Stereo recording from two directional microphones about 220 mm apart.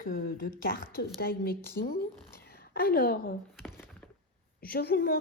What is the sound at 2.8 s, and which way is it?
Speech, 45° left (ahead or behind).